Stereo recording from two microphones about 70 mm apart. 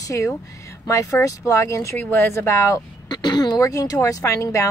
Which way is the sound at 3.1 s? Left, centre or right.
Left.